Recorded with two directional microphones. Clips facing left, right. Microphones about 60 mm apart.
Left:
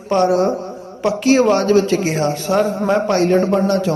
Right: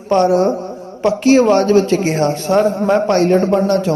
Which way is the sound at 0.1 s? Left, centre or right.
Right.